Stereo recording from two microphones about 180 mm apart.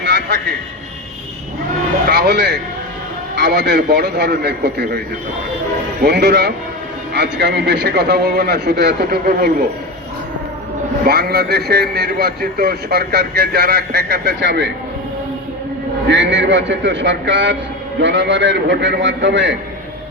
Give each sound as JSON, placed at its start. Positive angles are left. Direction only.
{"t": 0.0, "sound": "vehicle", "side_deg": -75}
{"t": 2.0, "sound": "a man's voice", "side_deg": -65}
{"t": 11.0, "sound": "a man's voice", "side_deg": -60}
{"t": 16.0, "sound": "a man's voice", "side_deg": -80}